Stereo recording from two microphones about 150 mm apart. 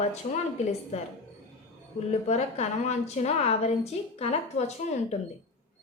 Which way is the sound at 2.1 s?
45° left (ahead or behind).